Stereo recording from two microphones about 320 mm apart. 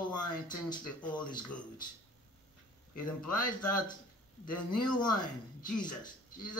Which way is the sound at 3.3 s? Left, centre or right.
Centre.